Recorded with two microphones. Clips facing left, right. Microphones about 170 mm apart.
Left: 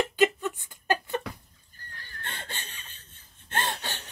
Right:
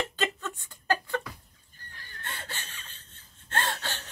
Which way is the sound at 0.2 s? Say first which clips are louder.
Left 8 dB; 15° left (ahead or behind).